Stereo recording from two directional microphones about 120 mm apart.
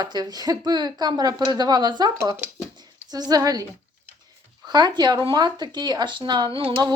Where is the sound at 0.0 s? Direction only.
35° right (ahead or behind).